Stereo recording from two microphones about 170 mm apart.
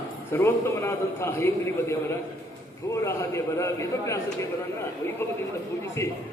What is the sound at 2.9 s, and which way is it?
A man's voice, 15° left (ahead or behind).